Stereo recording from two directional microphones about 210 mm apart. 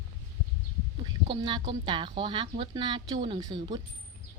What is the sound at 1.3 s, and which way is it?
A woman's voice, 20° right (ahead or behind).